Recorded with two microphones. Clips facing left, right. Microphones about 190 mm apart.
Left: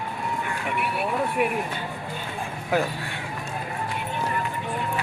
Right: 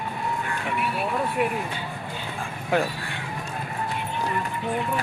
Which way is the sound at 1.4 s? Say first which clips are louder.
Even; 10° left (ahead or behind).